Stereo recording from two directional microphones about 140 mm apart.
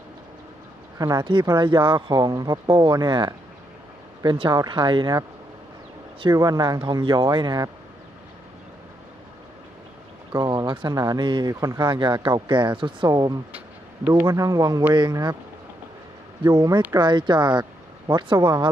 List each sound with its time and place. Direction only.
0.9 s speech: 25° right (ahead or behind)
6.3 s speech: 25° right (ahead or behind)
10.3 s speech: 30° right (ahead or behind)
16.4 s speech: 30° right (ahead or behind)